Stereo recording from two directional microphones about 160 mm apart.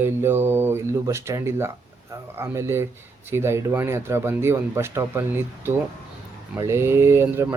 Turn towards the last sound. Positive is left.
turn(degrees=-15)  # may be behind; listen again after turning